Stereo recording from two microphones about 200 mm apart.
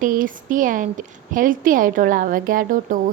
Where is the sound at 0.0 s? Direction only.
40° right (ahead or behind).